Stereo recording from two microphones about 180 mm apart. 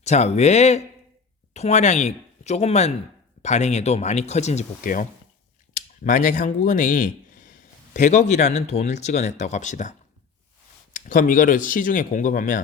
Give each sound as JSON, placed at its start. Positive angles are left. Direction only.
{"t": 0.0, "sound": "speech", "side_deg": 40}
{"t": 10.9, "sound": "speech", "side_deg": 50}